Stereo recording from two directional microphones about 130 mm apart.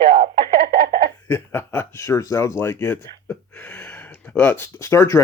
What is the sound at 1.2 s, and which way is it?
Speech, 15° left (ahead or behind).